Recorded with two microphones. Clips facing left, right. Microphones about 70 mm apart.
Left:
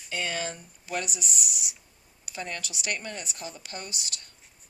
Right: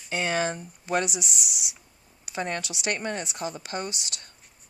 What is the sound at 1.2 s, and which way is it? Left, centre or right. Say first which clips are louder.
Speech: right 2 dB; left.